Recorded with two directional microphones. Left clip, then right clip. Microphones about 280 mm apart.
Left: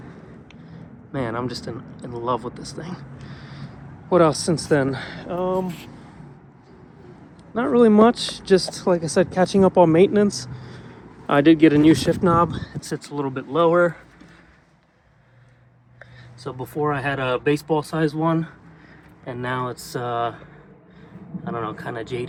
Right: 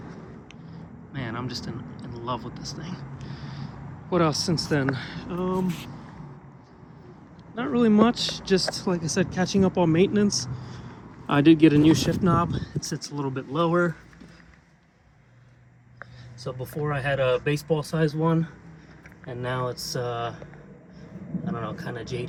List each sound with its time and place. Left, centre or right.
1.1 s speech: centre
3.2 s vehicle: centre
4.1 s speech: centre
5.6 s speech: right
7.5 s speech: centre
16.8 s speech: centre
21.4 s speech: centre